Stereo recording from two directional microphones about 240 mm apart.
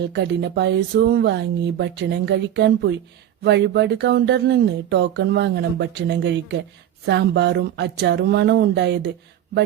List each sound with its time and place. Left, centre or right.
0.1 s speech: right